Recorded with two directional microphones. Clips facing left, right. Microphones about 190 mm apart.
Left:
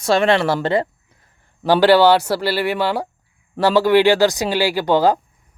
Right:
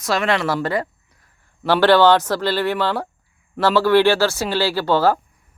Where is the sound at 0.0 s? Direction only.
30° left (ahead or behind).